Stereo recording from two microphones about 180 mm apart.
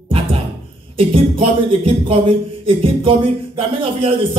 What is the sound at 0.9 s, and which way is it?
Speech, 30° right (ahead or behind).